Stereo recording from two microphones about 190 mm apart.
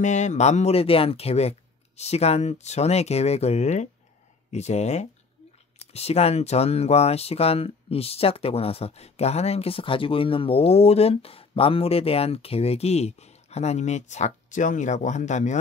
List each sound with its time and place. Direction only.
0.0 s speech: 40° left (ahead or behind)